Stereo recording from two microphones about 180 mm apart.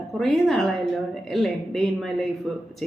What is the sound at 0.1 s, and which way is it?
A woman's voice, centre (ahead or behind).